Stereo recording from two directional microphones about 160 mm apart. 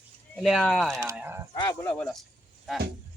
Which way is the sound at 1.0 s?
15° right (ahead or behind).